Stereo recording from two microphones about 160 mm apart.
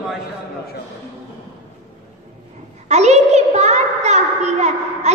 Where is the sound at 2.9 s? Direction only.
45° right (ahead or behind).